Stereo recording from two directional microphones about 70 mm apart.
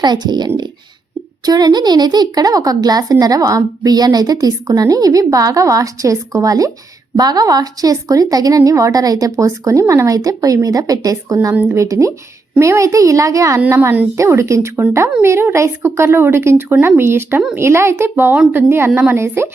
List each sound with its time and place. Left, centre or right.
0.0 s speech: right
1.5 s speech: right
7.2 s a child's voice: right
13.7 s a child's voice: right